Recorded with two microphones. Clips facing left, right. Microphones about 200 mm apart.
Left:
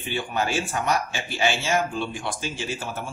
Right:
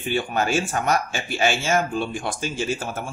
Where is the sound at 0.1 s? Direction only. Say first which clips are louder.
Right 3 dB; 45° right (ahead or behind).